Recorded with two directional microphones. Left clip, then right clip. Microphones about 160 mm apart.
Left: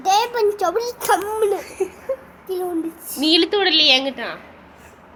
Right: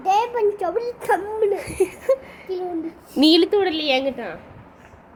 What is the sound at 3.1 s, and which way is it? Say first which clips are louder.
A woman's voice: right 1 dB; 70° right (ahead or behind).